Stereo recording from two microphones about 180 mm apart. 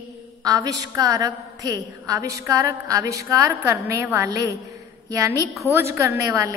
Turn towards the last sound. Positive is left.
turn(degrees=-15)  # may be behind; listen again after turning